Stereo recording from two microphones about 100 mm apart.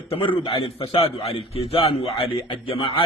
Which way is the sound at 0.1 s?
65° left (ahead or behind).